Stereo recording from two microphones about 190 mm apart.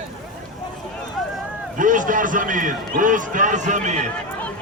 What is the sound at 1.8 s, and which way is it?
A man's voice, 45° right (ahead or behind).